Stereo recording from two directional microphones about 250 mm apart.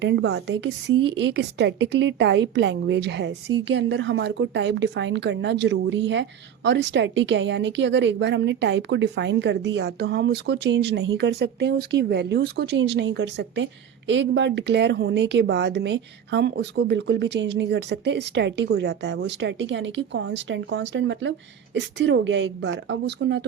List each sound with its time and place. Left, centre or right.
0.0 s a woman's voice: right